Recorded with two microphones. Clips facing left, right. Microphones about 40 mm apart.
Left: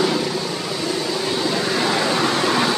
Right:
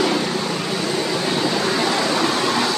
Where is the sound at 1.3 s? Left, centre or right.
Centre.